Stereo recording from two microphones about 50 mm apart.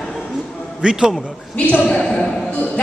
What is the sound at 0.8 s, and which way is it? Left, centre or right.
Speech, centre.